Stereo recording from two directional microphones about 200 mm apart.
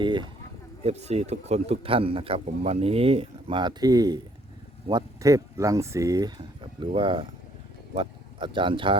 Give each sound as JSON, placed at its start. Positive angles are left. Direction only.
{"t": 0.0, "sound": "a man's voice", "side_deg": -25}
{"t": 0.9, "sound": "a man's voice", "side_deg": -35}